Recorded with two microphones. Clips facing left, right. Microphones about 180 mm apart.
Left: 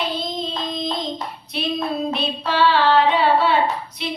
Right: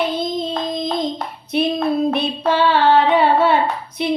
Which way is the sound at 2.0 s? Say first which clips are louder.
Right 6 dB; 50° right (ahead or behind).